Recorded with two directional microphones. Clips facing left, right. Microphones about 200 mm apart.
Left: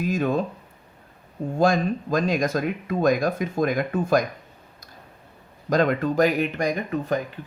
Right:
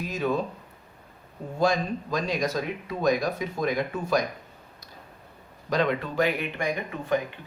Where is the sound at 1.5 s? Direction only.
50° left (ahead or behind).